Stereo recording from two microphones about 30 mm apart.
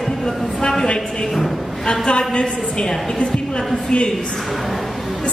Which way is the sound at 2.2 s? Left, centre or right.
Left.